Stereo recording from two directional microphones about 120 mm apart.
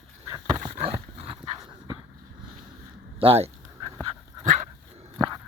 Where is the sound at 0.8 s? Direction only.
55° right (ahead or behind).